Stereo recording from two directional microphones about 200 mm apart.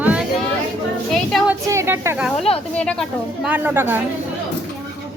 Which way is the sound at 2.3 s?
30° left (ahead or behind).